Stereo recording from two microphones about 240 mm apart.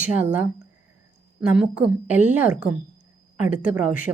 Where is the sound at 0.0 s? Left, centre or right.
Centre.